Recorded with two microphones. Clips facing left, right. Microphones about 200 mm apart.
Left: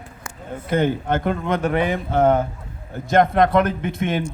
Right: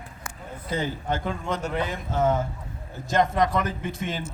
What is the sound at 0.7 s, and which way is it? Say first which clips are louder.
Speech: left 8 dB; 60° left (ahead or behind).